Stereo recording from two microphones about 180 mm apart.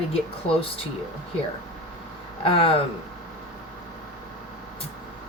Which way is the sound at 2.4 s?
30° left (ahead or behind).